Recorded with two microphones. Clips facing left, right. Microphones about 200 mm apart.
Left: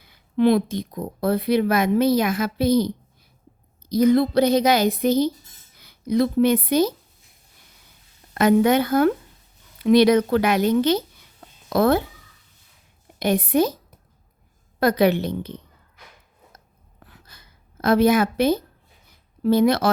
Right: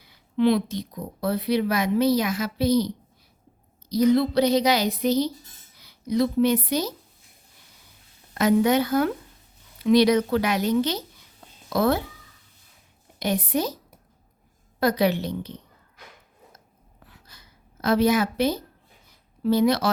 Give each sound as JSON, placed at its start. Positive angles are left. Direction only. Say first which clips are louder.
{"t": 0.0, "sound": "a woman's voice", "louder": "left 3 dB", "side_deg": 50}
{"t": 8.3, "sound": "a woman's voice", "louder": "left 3 dB", "side_deg": 55}
{"t": 13.1, "sound": "a woman's voice", "louder": "left 6 dB", "side_deg": 55}
{"t": 14.8, "sound": "a woman's voice", "louder": "left 4 dB", "side_deg": 55}
{"t": 17.1, "sound": "a sound", "louder": "left 1 dB", "side_deg": 55}
{"t": 19.4, "sound": "speech", "louder": "left 3 dB", "side_deg": 55}